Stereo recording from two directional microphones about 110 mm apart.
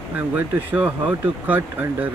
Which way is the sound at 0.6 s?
15° right (ahead or behind).